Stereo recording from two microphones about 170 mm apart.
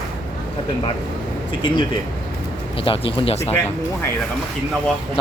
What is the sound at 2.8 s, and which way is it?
Speech, 30° left (ahead or behind).